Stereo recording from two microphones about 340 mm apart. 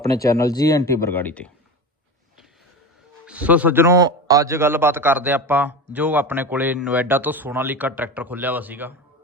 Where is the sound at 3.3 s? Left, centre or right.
Centre.